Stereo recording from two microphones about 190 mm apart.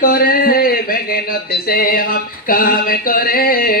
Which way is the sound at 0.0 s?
50° left (ahead or behind).